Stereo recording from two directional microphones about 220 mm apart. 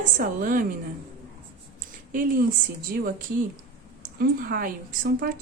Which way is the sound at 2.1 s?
40° right (ahead or behind).